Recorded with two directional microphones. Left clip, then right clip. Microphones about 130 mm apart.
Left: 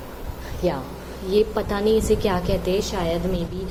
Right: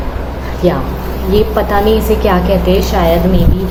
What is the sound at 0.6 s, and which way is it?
Speech, 45° left (ahead or behind).